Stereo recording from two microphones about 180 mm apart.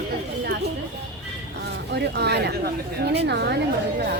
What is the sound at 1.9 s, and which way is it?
Speech, 70° right (ahead or behind).